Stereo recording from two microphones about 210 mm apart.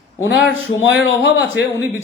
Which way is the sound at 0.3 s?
60° left (ahead or behind).